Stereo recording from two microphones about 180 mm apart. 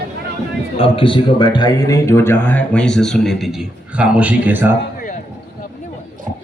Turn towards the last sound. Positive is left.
turn(degrees=-10)  # may be behind; listen again after turning